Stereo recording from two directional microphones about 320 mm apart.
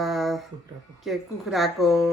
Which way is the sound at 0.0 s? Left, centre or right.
Centre.